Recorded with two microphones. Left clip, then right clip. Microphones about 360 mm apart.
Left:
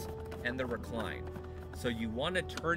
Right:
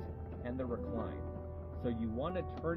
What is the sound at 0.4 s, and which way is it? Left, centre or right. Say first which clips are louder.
Speech: left 4 dB; left.